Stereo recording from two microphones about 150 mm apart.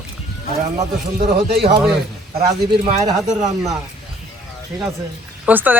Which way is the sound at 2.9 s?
50° right (ahead or behind).